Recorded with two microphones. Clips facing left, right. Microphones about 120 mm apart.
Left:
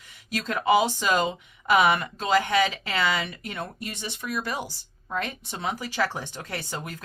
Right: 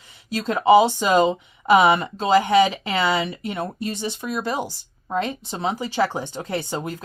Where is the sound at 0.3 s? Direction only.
30° right (ahead or behind).